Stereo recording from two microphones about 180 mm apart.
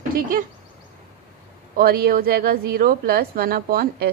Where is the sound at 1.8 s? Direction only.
60° right (ahead or behind).